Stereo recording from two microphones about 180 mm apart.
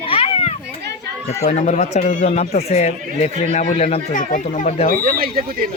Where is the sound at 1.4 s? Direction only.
40° left (ahead or behind).